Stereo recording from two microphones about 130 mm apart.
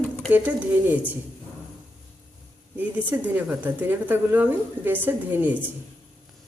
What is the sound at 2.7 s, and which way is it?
A woman's voice, 15° right (ahead or behind).